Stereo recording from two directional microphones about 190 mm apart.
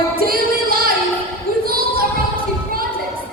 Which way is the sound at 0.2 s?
50° right (ahead or behind).